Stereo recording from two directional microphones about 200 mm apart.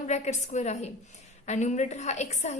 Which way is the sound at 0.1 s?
35° left (ahead or behind).